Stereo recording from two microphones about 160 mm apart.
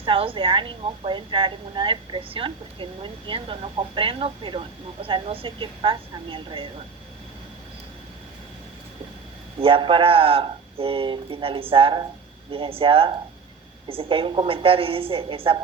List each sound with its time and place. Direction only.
0.0 s a woman's voice: 35° right (ahead or behind)
9.6 s a woman's voice: 35° right (ahead or behind)